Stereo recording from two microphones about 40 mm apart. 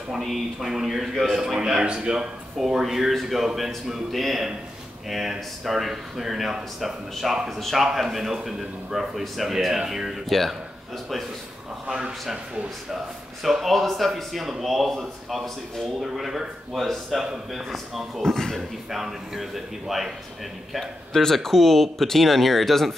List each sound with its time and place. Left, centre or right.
0.2 s a man's voice: centre
1.3 s a man's voice: centre
2.5 s a man's voice: centre
12.9 s a man's voice: centre
18.2 s a man's voice: centre
18.9 s a man's voice: centre
21.1 s a man's voice: centre